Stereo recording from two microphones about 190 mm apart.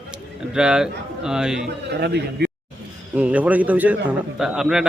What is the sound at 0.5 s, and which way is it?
Speech, 5° right (ahead or behind).